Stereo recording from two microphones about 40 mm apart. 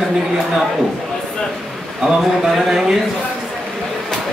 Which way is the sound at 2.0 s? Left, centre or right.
Centre.